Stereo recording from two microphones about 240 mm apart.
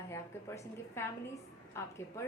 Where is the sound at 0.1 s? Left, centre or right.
Centre.